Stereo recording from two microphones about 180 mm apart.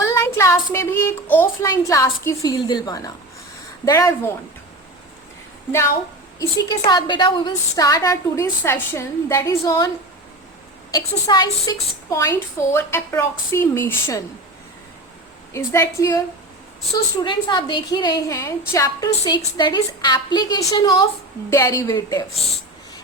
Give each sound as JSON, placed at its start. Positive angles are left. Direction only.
{"t": 0.0, "sound": "a woman's voice", "side_deg": 15}
{"t": 6.4, "sound": "a woman's voice", "side_deg": 20}
{"t": 11.3, "sound": "a woman's voice", "side_deg": 20}
{"t": 15.5, "sound": "a woman's voice", "side_deg": 15}
{"t": 17.2, "sound": "a woman's voice", "side_deg": 25}